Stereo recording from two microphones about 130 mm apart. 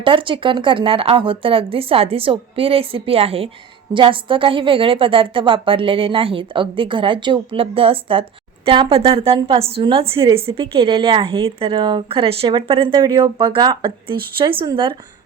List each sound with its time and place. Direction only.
0.0 s a woman's voice: 40° right (ahead or behind)